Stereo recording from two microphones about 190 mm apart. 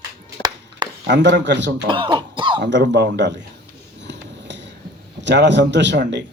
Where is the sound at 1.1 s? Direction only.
70° right (ahead or behind).